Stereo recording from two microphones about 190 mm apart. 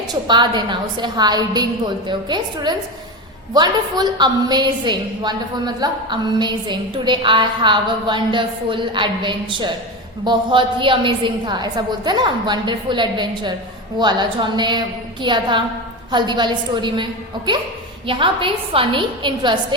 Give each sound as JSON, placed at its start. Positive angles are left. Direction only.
{"t": 0.1, "sound": "a woman's voice", "side_deg": -25}